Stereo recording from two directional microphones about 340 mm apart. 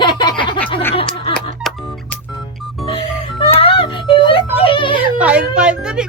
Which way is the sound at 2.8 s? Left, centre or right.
Centre.